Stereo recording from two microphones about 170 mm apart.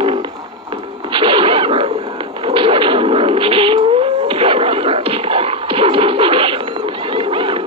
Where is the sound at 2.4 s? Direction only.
30° right (ahead or behind).